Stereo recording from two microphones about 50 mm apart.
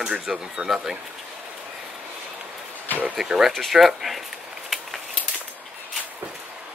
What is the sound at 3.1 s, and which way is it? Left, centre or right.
Speech, centre.